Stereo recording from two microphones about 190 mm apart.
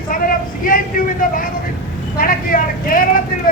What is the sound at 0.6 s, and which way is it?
A man's voice, 45° left (ahead or behind).